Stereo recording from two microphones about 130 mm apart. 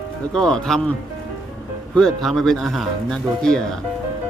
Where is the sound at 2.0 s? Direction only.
5° left (ahead or behind).